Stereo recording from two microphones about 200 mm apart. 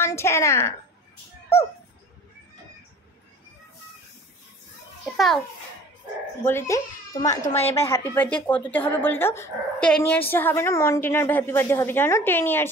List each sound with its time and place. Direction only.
0.0 s speech: 15° left (ahead or behind)
1.5 s a sound: 15° left (ahead or behind)
5.1 s a child's voice: centre (ahead or behind)
6.4 s speech: 10° left (ahead or behind)
7.2 s a woman's voice: 35° left (ahead or behind)
7.7 s speech: 15° left (ahead or behind)